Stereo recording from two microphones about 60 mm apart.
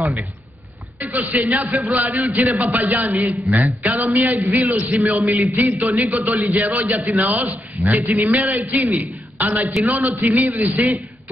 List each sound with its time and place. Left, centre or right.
0.9 s a man's voice: right